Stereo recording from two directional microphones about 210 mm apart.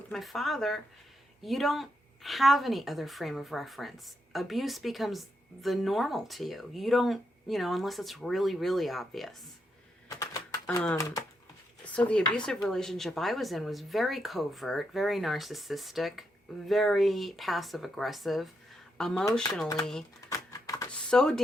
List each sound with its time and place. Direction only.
0.1 s speech: centre (ahead or behind)
10.1 s typewriter: 15° left (ahead or behind)
11.9 s speech: 5° left (ahead or behind)
20.3 s typewriter: 15° left (ahead or behind)
21.1 s speech: 5° left (ahead or behind)